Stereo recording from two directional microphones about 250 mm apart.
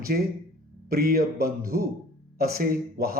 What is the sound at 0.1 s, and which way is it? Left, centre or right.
Speech, right.